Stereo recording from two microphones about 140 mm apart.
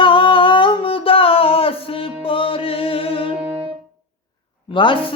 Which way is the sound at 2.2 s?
40° left (ahead or behind).